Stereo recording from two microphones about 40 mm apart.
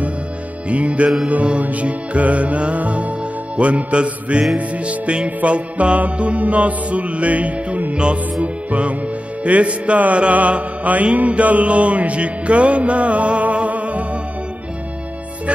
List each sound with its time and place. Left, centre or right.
0.7 s music: right